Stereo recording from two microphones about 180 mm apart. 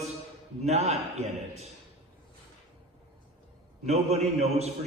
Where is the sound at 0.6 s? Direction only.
35° right (ahead or behind).